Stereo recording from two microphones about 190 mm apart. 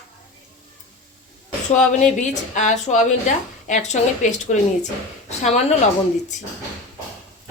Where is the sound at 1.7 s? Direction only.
40° left (ahead or behind).